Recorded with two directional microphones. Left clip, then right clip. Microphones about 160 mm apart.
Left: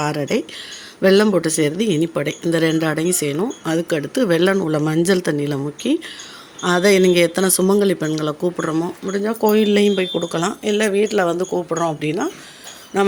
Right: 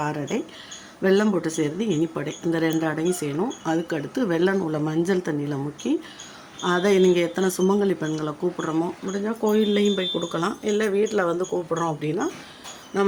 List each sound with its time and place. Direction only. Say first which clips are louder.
0.0 s speech: left 6 dB; 25° left (ahead or behind)